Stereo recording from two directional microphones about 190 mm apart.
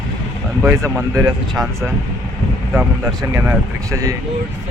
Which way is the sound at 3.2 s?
15° right (ahead or behind).